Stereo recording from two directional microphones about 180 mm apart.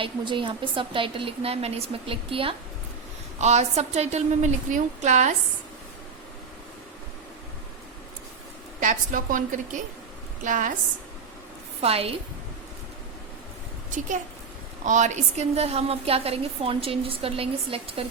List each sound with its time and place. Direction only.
0.0 s a woman's voice: 25° right (ahead or behind)
8.8 s a woman's voice: 45° right (ahead or behind)
11.8 s a woman's voice: 35° right (ahead or behind)
14.8 s a woman's voice: 45° right (ahead or behind)